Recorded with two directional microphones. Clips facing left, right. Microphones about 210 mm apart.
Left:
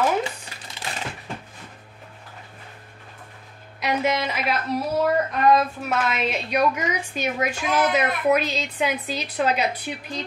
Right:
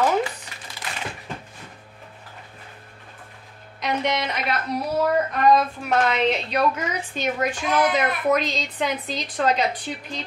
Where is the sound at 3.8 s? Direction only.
5° left (ahead or behind).